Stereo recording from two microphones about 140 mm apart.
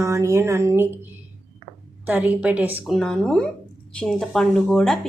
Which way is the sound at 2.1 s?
10° right (ahead or behind).